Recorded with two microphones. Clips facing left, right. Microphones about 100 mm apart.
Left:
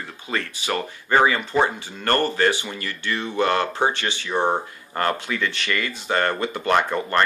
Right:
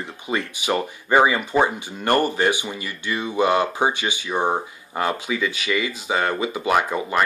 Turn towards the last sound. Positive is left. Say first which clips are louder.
# even
turn(degrees=-5)  # may be behind; listen again after turning